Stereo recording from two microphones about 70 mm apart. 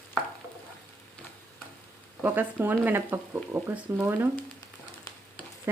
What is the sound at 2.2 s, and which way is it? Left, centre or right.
Speech, right.